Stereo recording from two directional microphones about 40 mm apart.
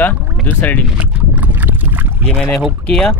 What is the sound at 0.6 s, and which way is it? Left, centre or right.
Speech, left.